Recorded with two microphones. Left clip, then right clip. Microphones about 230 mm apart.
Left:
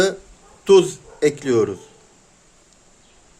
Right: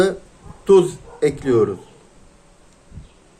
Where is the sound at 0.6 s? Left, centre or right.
Left.